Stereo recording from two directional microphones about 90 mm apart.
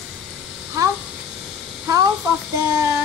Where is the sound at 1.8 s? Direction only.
45° right (ahead or behind).